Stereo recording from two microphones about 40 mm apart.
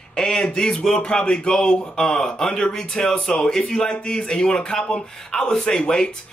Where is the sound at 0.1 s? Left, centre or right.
Centre.